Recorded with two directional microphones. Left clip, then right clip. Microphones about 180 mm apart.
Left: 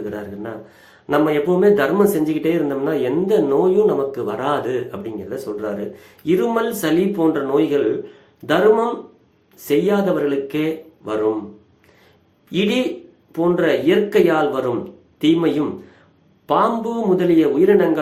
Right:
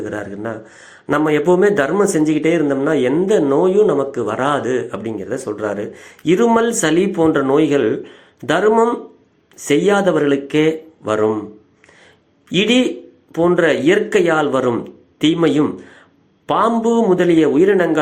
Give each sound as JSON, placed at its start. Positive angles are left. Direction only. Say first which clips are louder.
{"t": 0.0, "sound": "speech", "louder": "right 4 dB", "side_deg": -30}
{"t": 12.5, "sound": "speech", "louder": "right 4 dB", "side_deg": -35}